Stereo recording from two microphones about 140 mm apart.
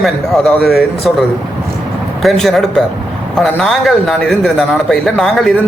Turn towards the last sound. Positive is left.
turn(degrees=0)  # may be behind; listen again after turning